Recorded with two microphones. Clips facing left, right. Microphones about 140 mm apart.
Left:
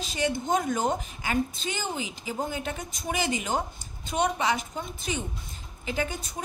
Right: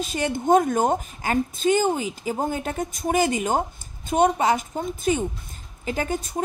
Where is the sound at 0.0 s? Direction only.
50° right (ahead or behind).